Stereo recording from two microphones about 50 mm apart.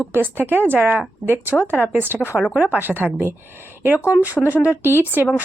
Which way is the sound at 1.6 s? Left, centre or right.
Left.